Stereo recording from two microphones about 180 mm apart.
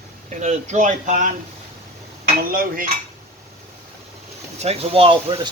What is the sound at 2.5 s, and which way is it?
Cutlery, 50° right (ahead or behind).